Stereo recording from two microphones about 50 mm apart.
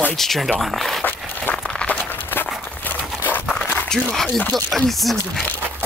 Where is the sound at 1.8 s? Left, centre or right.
Left.